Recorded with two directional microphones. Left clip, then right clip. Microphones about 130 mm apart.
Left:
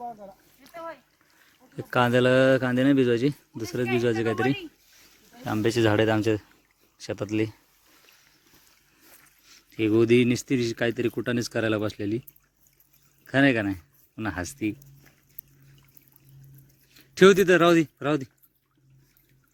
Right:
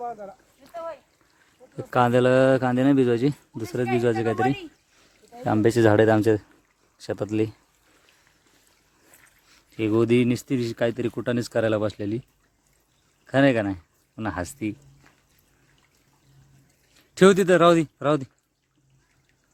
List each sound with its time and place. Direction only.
0.6 s speech: 5° right (ahead or behind)
5.4 s speech: 20° right (ahead or behind)
9.5 s speech: 10° right (ahead or behind)
13.2 s speech: 10° right (ahead or behind)
16.9 s speech: 15° right (ahead or behind)